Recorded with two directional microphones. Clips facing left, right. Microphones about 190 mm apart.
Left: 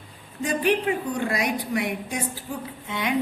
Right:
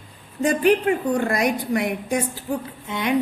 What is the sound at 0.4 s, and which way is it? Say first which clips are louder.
A woman's voice: right 5 dB; 50° right (ahead or behind).